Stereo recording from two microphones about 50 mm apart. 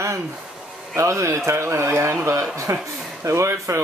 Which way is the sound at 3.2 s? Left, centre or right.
Right.